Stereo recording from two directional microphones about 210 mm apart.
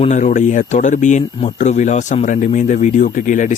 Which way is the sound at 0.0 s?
35° left (ahead or behind).